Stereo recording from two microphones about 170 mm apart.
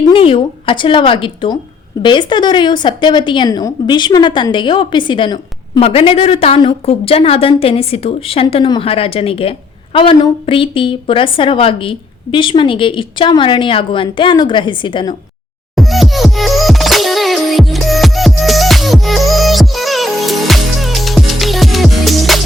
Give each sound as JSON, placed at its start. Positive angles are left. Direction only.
{"t": 0.1, "sound": "a woman's voice", "side_deg": 30}
{"t": 15.7, "sound": "music", "side_deg": 0}